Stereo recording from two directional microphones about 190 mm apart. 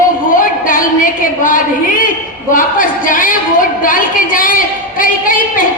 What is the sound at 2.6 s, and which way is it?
A woman's voice, 45° left (ahead or behind).